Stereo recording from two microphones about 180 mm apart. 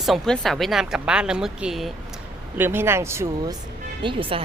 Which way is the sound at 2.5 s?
10° right (ahead or behind).